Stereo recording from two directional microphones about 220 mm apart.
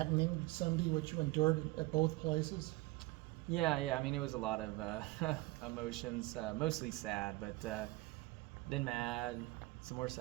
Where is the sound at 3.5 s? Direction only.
Centre (ahead or behind).